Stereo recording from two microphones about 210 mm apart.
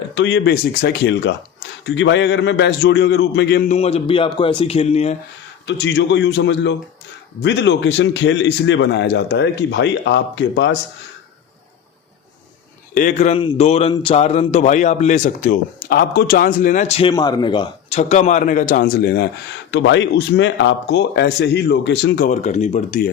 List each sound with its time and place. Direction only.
0.1 s speech: 60° left (ahead or behind)
3.7 s speech: 30° left (ahead or behind)
5.6 s speech: 60° left (ahead or behind)
12.9 s a man's voice: 40° left (ahead or behind)
17.1 s a man's voice: 20° left (ahead or behind); by 19.3 s 50° left (ahead or behind)
19.7 s speech: 60° left (ahead or behind)
22.3 s a man's voice: 35° left (ahead or behind)